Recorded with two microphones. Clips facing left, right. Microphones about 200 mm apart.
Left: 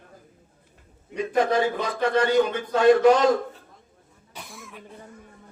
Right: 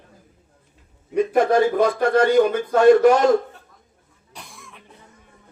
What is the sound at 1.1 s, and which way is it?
A man's voice, 50° right (ahead or behind).